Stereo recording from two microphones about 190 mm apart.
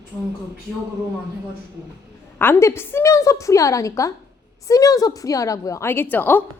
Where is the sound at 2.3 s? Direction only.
10° left (ahead or behind).